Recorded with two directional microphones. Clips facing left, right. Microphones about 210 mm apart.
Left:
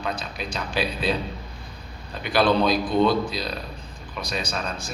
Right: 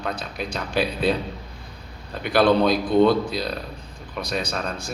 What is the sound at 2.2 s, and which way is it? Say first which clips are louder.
A man's voice: right 3 dB; 55° right (ahead or behind).